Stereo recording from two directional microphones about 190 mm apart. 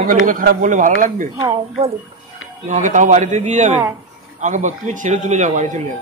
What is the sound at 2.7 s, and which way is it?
Speech, 40° right (ahead or behind).